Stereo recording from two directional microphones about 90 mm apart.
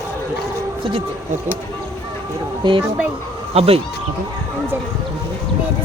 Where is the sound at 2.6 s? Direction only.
60° right (ahead or behind).